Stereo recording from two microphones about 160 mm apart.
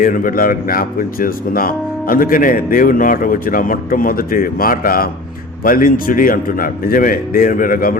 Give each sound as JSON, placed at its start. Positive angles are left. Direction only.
{"t": 0.0, "sound": "speech", "side_deg": 60}